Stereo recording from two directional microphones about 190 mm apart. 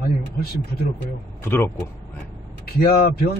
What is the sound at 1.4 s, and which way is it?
Speech, 10° left (ahead or behind).